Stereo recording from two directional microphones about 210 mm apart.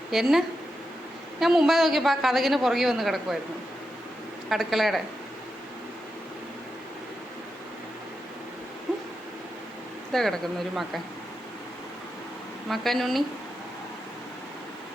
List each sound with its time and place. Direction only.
0.1 s a woman's voice: centre (ahead or behind)
4.4 s a woman's voice: centre (ahead or behind)
10.1 s a woman's voice: centre (ahead or behind)
12.6 s a woman's voice: centre (ahead or behind)